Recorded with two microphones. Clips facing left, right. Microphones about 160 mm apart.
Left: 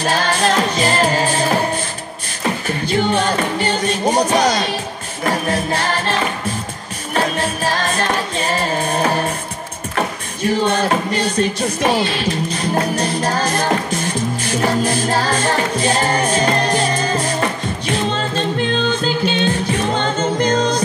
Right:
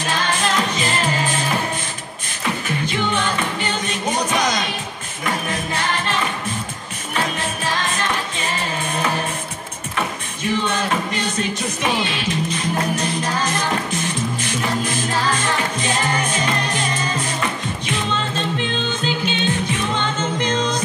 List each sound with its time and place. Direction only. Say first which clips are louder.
0.0 s music: left 5 dB; 35° left (ahead or behind)
7.2 s music: left 5 dB; 40° left (ahead or behind)